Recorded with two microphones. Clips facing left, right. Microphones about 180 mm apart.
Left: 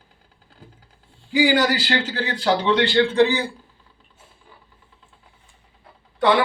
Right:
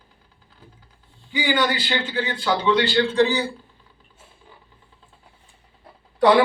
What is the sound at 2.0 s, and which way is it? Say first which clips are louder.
Speech: left 2 dB; 70° left (ahead or behind).